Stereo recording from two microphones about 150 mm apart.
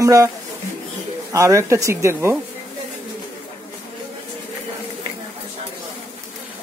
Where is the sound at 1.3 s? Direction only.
20° right (ahead or behind).